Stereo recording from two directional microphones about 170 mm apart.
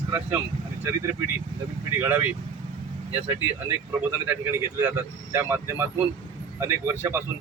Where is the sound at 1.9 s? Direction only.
15° right (ahead or behind).